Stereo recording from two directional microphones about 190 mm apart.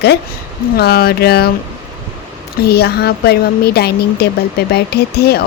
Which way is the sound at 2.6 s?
55° left (ahead or behind).